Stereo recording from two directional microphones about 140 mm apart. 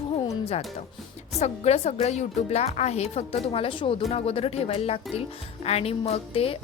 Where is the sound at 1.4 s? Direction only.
50° left (ahead or behind).